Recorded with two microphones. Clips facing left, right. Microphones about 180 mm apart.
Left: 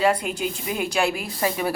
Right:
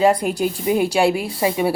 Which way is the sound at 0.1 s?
40° right (ahead or behind).